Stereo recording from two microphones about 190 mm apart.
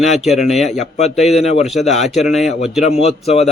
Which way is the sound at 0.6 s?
35° left (ahead or behind).